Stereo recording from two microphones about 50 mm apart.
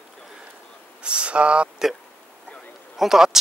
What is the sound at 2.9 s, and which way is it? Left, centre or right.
Speech, centre.